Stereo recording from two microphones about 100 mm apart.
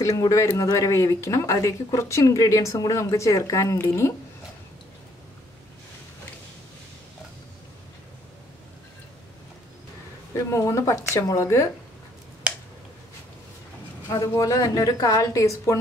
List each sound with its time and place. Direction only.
0.0 s speech: 30° left (ahead or behind)
10.3 s speech: 30° left (ahead or behind)
14.0 s speech: 35° left (ahead or behind)